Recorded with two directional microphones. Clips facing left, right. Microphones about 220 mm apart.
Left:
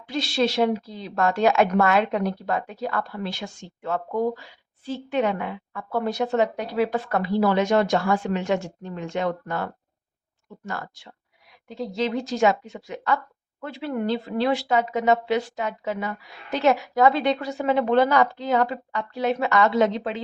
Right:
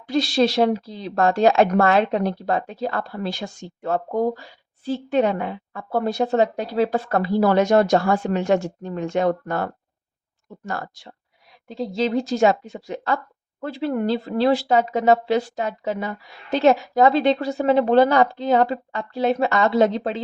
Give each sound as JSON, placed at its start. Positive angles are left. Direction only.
{"t": 0.1, "sound": "speech", "side_deg": -40}